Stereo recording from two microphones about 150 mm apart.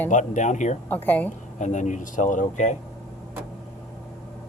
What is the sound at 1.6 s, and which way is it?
Speech, 55° left (ahead or behind).